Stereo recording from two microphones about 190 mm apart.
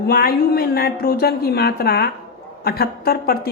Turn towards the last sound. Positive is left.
turn(degrees=55)  # may be behind; listen again after turning